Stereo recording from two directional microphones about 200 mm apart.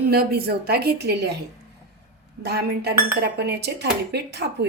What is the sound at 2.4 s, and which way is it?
Speech, 55° right (ahead or behind).